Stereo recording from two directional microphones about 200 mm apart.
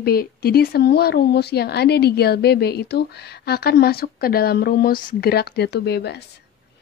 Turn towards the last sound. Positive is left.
turn(degrees=55)  # may be behind; listen again after turning